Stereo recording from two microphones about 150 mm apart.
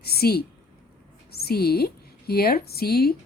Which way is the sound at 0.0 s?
90° left.